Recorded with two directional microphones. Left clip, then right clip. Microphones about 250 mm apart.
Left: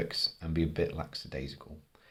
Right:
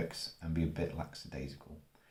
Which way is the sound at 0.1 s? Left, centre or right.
Left.